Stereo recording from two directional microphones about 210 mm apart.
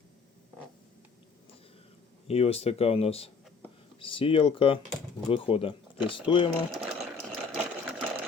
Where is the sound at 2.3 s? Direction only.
30° left (ahead or behind).